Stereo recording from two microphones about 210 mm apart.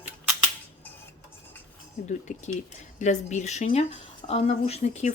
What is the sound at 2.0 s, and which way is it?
Speech, 35° left (ahead or behind).